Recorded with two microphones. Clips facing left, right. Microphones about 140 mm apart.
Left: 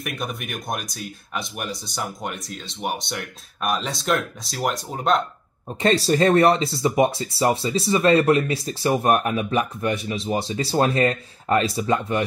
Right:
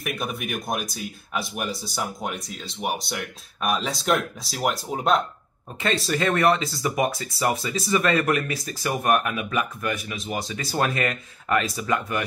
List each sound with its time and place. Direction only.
0.0 s speech: centre (ahead or behind)
5.8 s speech: 35° left (ahead or behind)